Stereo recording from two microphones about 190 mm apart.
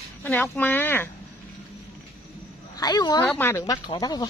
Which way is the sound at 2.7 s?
20° left (ahead or behind).